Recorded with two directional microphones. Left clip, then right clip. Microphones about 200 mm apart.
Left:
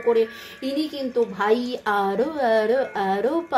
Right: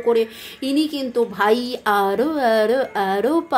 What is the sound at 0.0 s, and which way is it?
A woman's voice, 25° right (ahead or behind).